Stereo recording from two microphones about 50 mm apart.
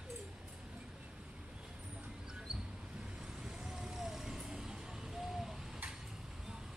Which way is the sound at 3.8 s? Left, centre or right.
Centre.